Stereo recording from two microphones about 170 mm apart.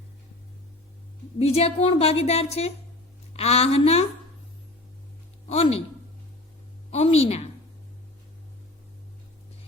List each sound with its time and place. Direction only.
1.4 s a woman's voice: 35° left (ahead or behind)
5.5 s a woman's voice: 35° left (ahead or behind)
6.9 s a woman's voice: 35° left (ahead or behind)